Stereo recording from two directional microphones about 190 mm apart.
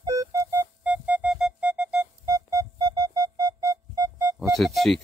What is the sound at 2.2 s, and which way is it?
Music, 15° right (ahead or behind).